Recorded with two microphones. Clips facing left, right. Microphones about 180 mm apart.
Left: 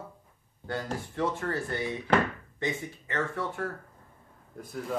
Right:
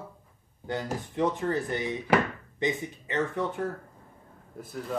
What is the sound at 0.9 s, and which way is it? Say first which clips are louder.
Speech: right 5 dB; 20° right (ahead or behind).